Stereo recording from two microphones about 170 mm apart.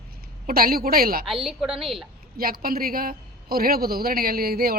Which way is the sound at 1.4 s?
5° right (ahead or behind).